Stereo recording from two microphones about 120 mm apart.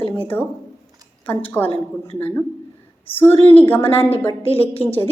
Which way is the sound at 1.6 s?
15° left (ahead or behind).